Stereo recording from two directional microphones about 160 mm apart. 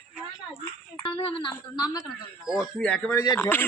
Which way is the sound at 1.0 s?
35° left (ahead or behind).